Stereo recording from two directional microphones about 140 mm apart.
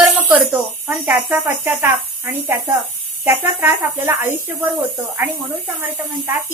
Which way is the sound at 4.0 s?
15° right (ahead or behind).